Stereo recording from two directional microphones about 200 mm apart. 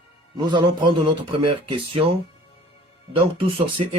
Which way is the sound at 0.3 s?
25° right (ahead or behind).